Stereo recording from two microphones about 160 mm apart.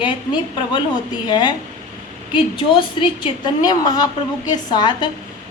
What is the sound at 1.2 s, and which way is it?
Speech, 25° left (ahead or behind).